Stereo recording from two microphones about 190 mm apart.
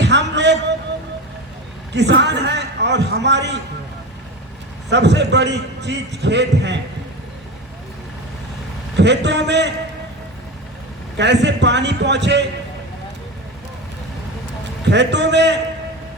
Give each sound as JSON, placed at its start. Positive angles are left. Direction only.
{"t": 0.0, "sound": "a sound", "side_deg": -65}
{"t": 1.9, "sound": "a man's voice", "side_deg": -65}
{"t": 4.9, "sound": "a man's voice", "side_deg": -65}
{"t": 9.0, "sound": "a man's voice", "side_deg": -65}
{"t": 11.2, "sound": "a man's voice", "side_deg": -65}
{"t": 14.8, "sound": "a man's voice", "side_deg": -65}